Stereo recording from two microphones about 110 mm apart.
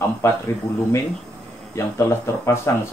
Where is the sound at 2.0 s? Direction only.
25° left (ahead or behind).